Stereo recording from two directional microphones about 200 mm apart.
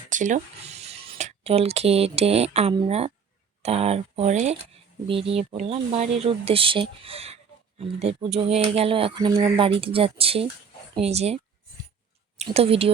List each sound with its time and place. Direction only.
0.1 s speech: 40° right (ahead or behind)
12.4 s speech: 30° right (ahead or behind)